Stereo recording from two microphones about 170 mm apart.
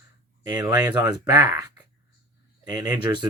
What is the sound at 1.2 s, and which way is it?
Speech, 20° right (ahead or behind).